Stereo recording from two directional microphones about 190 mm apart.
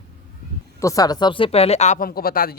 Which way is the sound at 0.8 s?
15° left (ahead or behind).